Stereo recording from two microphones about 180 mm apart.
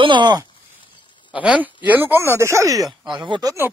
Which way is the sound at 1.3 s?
5° right (ahead or behind).